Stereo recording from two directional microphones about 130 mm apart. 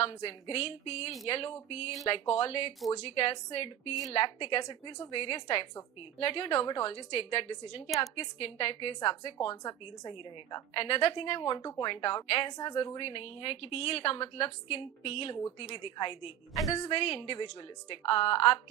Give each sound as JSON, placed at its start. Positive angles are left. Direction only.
{"t": 0.0, "sound": "a woman's voice", "side_deg": 50}
{"t": 16.6, "sound": "a woman's voice", "side_deg": 25}
{"t": 16.9, "sound": "a woman's voice", "side_deg": 45}